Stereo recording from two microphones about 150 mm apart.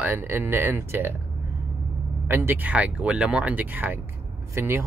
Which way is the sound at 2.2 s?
15° right (ahead or behind).